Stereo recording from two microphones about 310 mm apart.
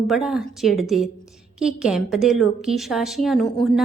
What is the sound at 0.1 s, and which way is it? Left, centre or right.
A woman's voice, centre.